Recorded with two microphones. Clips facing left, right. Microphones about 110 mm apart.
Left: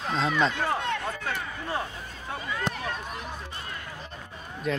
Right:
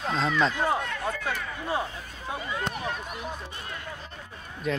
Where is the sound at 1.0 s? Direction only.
15° right (ahead or behind).